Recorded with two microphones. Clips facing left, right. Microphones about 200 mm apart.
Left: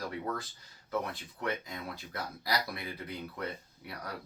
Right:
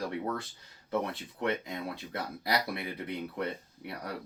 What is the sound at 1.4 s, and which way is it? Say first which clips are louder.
Speech: right 4 dB; 25° right (ahead or behind).